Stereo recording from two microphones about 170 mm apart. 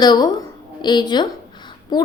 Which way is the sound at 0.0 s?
25° left (ahead or behind).